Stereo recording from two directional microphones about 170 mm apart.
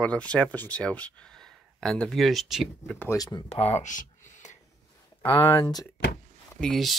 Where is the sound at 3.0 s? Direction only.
20° left (ahead or behind).